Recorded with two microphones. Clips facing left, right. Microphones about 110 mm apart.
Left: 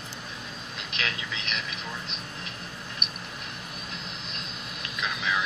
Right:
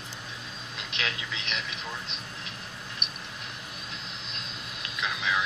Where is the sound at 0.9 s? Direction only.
25° right (ahead or behind).